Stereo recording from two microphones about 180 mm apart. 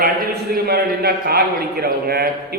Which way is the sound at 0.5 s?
60° right (ahead or behind).